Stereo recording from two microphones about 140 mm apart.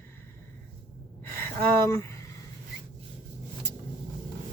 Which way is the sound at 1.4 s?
15° left (ahead or behind).